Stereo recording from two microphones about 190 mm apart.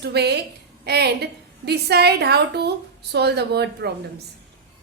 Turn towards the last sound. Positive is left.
turn(degrees=-60)  # may be behind; listen again after turning